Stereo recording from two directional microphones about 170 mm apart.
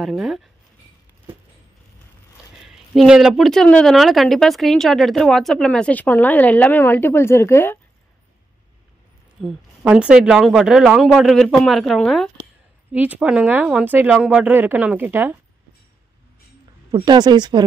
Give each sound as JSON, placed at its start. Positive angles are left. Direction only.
{"t": 0.0, "sound": "speech", "side_deg": 0}
{"t": 2.6, "sound": "speech", "side_deg": -5}
{"t": 9.4, "sound": "speech", "side_deg": 0}
{"t": 16.9, "sound": "speech", "side_deg": -25}